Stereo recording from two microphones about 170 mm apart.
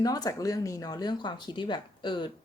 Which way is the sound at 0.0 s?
20° left (ahead or behind).